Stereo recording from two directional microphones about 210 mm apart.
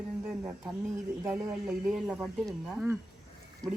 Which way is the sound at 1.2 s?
5° right (ahead or behind).